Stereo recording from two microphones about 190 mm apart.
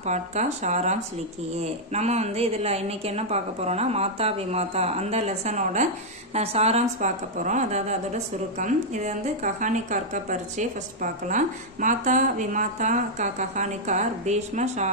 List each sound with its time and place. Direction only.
0.0 s a woman's voice: 35° right (ahead or behind)